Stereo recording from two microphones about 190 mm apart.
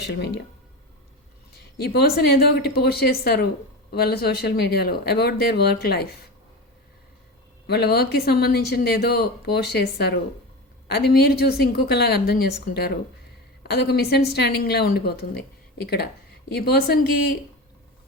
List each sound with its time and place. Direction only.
0.1 s speech: 60° left (ahead or behind)
1.8 s speech: 55° left (ahead or behind)
7.7 s speech: 55° left (ahead or behind)
16.5 s speech: 55° left (ahead or behind)